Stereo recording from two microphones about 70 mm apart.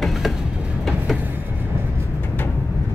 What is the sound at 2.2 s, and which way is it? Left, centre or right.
Vehicle, left.